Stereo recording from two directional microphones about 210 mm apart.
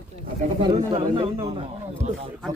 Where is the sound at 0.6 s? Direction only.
25° right (ahead or behind).